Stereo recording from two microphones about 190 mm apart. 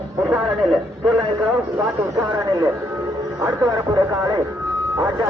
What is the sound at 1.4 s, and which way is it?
A man's voice, 15° right (ahead or behind).